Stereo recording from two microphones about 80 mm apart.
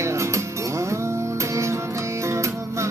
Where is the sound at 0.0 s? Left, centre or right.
Right.